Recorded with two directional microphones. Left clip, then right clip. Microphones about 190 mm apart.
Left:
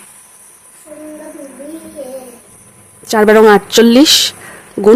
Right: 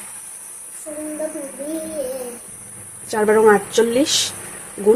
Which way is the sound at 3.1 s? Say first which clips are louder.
Left 7 dB; 45° left (ahead or behind).